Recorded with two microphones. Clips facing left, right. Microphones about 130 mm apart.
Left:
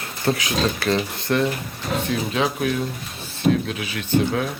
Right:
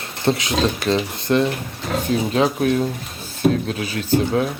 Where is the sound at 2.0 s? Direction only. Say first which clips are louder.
Right 6 dB; 35° right (ahead or behind).